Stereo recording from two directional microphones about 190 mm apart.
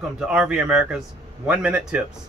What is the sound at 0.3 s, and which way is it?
Speech, 5° right (ahead or behind).